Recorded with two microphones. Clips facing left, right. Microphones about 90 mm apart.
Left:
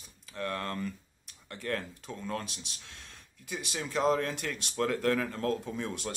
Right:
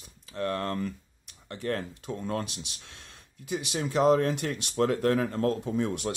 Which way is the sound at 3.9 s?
45° right (ahead or behind).